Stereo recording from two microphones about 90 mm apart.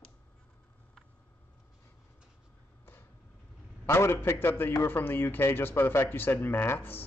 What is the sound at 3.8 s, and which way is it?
A man's voice, 30° left (ahead or behind).